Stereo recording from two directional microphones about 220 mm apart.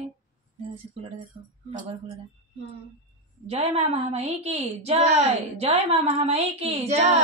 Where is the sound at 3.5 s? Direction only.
30° right (ahead or behind).